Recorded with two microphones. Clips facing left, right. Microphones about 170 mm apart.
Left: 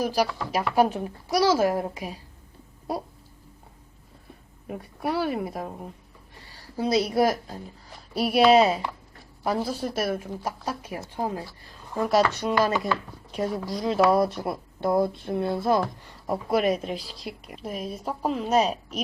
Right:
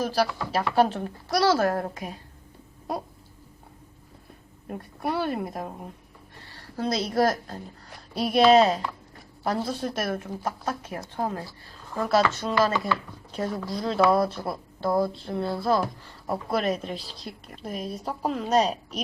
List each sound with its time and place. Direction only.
0.0 s a woman's voice: 10° left (ahead or behind)
5.0 s speech: 5° left (ahead or behind)
6.7 s a woman's voice: 10° left (ahead or behind)